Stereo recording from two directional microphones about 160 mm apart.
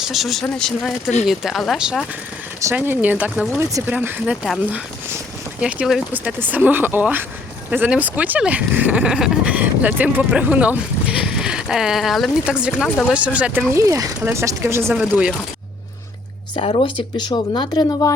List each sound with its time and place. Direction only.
0.0 s speech: centre (ahead or behind)
3.6 s speech: 20° right (ahead or behind)
5.5 s speech: 5° right (ahead or behind)
13.7 s speech: 20° right (ahead or behind)
14.9 s speech: 5° right (ahead or behind)
16.6 s speech: 35° left (ahead or behind)